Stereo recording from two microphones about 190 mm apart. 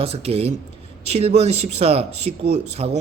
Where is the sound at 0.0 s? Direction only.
30° right (ahead or behind).